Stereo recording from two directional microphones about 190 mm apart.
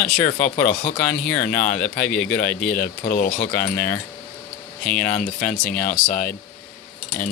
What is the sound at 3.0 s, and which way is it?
Speech, 45° left (ahead or behind).